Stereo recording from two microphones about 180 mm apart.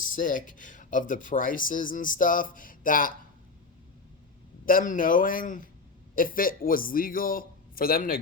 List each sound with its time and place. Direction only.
0.0 s speech: 45° left (ahead or behind)
4.6 s speech: 50° left (ahead or behind)